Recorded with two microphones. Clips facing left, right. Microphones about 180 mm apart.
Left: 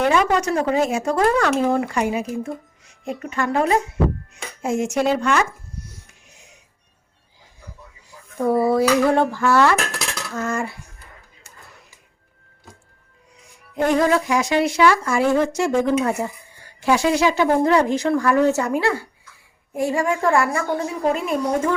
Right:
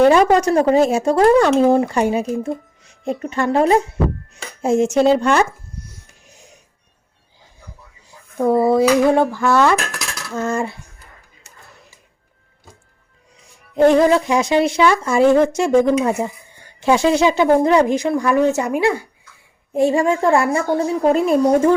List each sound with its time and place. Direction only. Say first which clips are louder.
0.0 s speech: right 6 dB; 35° right (ahead or behind)
8.4 s speech: right 3 dB; 20° right (ahead or behind)
9.3 s dishes: right 2 dB; 15° right (ahead or behind)
10.3 s cutlery: right 4 dB; 25° right (ahead or behind)
13.7 s speech: right 6 dB; 30° right (ahead or behind)